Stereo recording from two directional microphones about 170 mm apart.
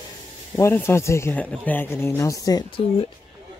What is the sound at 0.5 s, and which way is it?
Speech, 15° left (ahead or behind).